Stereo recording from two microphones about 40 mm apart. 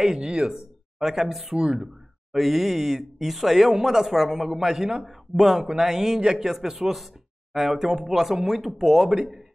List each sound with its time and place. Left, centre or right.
0.0 s speech: centre
0.5 s speech: centre